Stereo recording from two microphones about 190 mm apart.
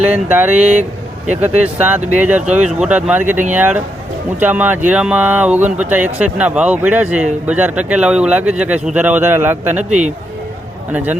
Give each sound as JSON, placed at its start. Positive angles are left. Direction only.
{"t": 0.0, "sound": "speech", "side_deg": -10}
{"t": 5.6, "sound": "speech", "side_deg": -40}
{"t": 5.9, "sound": "speech", "side_deg": -10}